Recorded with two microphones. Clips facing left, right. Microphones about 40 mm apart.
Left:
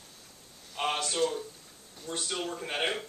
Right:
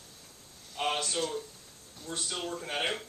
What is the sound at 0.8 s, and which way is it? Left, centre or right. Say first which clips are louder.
Speech: left 2 dB; centre.